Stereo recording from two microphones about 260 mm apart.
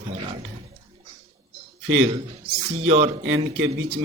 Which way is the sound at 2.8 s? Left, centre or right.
Right.